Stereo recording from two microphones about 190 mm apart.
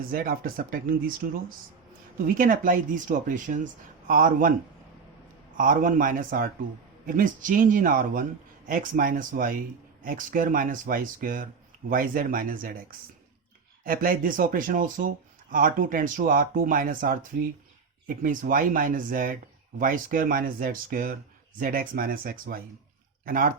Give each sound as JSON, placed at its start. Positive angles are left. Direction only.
{"t": 0.1, "sound": "speech", "side_deg": -50}
{"t": 5.5, "sound": "speech", "side_deg": -45}
{"t": 13.8, "sound": "speech", "side_deg": -50}
{"t": 18.2, "sound": "speech", "side_deg": -45}